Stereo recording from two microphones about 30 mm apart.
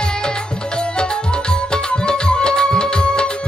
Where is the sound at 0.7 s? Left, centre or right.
Left.